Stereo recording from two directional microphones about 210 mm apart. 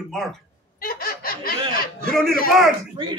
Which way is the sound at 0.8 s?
45° left (ahead or behind).